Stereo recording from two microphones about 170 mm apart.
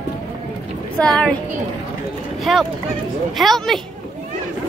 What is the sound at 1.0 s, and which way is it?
Speech, 5° left (ahead or behind).